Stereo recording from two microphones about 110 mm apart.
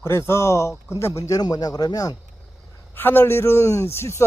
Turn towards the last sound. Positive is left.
turn(degrees=25)  # may be behind; listen again after turning